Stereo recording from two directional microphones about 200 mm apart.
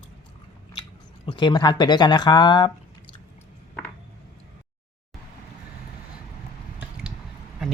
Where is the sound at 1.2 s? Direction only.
25° left (ahead or behind).